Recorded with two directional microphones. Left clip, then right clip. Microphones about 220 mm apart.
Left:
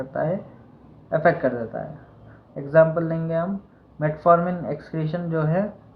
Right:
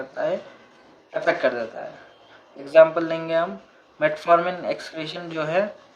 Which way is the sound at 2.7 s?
25° right (ahead or behind).